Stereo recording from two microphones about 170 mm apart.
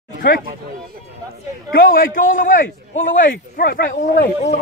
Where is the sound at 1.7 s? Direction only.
60° left (ahead or behind).